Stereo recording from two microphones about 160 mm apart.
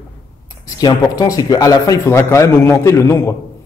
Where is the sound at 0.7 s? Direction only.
25° left (ahead or behind).